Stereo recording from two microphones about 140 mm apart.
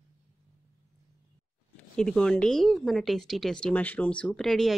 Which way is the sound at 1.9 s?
5° left (ahead or behind).